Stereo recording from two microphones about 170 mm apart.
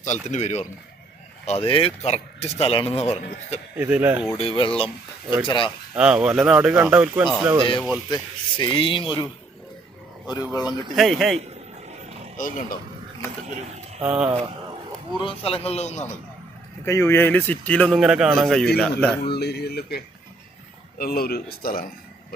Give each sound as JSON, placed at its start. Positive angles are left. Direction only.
{"t": 0.0, "sound": "a man's voice", "side_deg": 45}
{"t": 3.8, "sound": "speech", "side_deg": -10}
{"t": 4.4, "sound": "speech", "side_deg": 35}
{"t": 5.9, "sound": "speech", "side_deg": -5}
{"t": 8.1, "sound": "speech", "side_deg": 25}
{"t": 10.5, "sound": "speech", "side_deg": 25}
{"t": 10.9, "sound": "speech", "side_deg": 0}
{"t": 12.4, "sound": "a man's voice", "side_deg": 50}
{"t": 14.0, "sound": "speech", "side_deg": -10}
{"t": 15.2, "sound": "speech", "side_deg": 35}
{"t": 16.8, "sound": "speech", "side_deg": 15}
{"t": 19.2, "sound": "speech", "side_deg": 70}
{"t": 21.0, "sound": "speech", "side_deg": 65}